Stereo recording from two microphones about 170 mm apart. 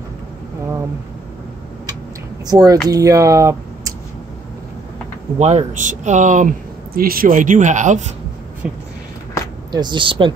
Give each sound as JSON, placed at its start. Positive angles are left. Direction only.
{"t": 2.4, "sound": "speech", "side_deg": -20}
{"t": 5.4, "sound": "speech", "side_deg": -40}
{"t": 8.6, "sound": "speech", "side_deg": -5}
{"t": 9.7, "sound": "speech", "side_deg": -25}